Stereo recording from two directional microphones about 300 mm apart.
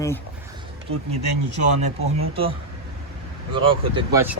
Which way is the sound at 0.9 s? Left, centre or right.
Right.